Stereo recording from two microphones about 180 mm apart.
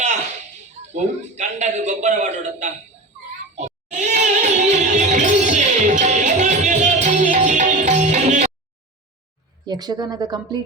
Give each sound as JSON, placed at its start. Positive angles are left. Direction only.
{"t": 0.9, "sound": "a man's voice", "side_deg": -40}
{"t": 3.9, "sound": "music", "side_deg": -40}
{"t": 9.6, "sound": "speech", "side_deg": -20}